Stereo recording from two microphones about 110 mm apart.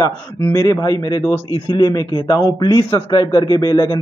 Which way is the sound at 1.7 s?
40° left (ahead or behind).